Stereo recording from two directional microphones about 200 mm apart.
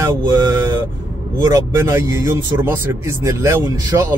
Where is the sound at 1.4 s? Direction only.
15° right (ahead or behind).